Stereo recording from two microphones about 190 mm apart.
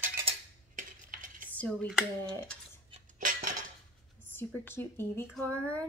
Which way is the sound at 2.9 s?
45° right (ahead or behind).